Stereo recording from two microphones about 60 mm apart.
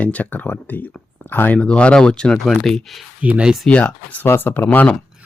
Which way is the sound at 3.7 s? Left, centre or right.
Left.